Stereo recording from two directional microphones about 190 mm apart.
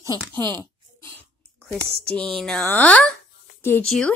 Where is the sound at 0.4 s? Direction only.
20° right (ahead or behind).